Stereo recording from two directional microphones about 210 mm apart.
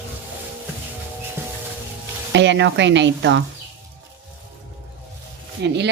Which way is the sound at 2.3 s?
60° right (ahead or behind).